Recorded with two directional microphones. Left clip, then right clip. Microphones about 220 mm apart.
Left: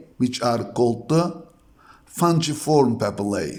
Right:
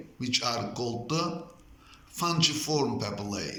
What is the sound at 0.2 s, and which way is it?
A man's voice, 55° left (ahead or behind).